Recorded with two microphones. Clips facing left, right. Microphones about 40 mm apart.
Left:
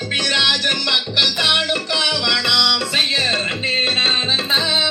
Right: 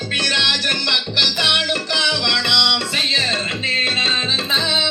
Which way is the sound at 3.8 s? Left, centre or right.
Centre.